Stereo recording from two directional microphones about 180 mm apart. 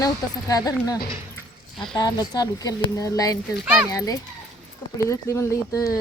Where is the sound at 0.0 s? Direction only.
20° left (ahead or behind).